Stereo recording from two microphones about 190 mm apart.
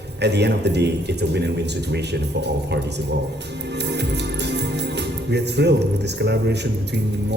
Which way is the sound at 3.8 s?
65° right (ahead or behind).